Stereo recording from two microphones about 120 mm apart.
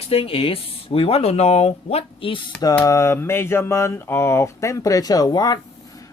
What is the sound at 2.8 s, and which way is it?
Speech, 25° left (ahead or behind).